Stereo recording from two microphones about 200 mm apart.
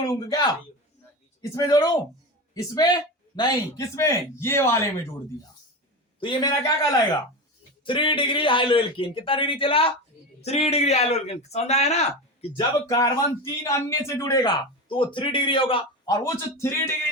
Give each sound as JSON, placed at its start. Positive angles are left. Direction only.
{"t": 0.1, "sound": "a man's voice", "side_deg": 15}
{"t": 6.1, "sound": "a man's voice", "side_deg": 20}
{"t": 12.5, "sound": "speech", "side_deg": 15}